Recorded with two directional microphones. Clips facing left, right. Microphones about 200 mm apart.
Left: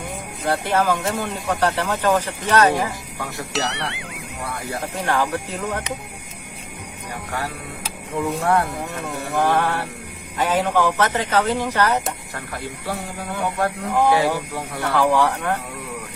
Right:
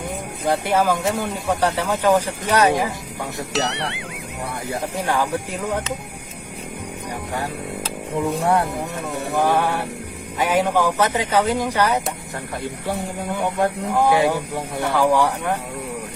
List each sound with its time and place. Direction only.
0.4 s speech: 10° right (ahead or behind)
3.5 s speech: centre (ahead or behind)
4.7 s speech: 10° right (ahead or behind)
8.4 s speech: 15° right (ahead or behind)
13.3 s speech: 15° right (ahead or behind)